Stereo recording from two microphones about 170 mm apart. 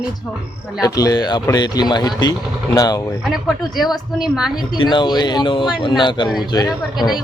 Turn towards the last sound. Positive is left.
turn(degrees=25)  # may be behind; listen again after turning